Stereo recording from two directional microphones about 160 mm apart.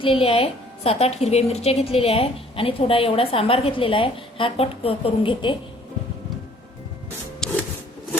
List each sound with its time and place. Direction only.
0.0 s a woman's voice: 35° left (ahead or behind)
7.4 s wood: 5° left (ahead or behind)